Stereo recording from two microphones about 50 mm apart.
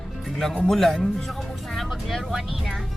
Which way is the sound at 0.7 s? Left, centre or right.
Centre.